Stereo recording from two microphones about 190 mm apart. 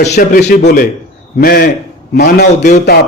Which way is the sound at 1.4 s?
55° left (ahead or behind).